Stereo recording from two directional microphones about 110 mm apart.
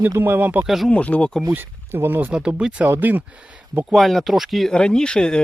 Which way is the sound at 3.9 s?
Centre (ahead or behind).